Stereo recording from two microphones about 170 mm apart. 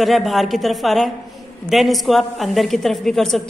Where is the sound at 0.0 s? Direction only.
Centre (ahead or behind).